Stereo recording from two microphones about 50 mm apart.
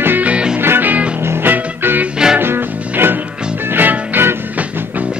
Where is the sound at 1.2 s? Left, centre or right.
Right.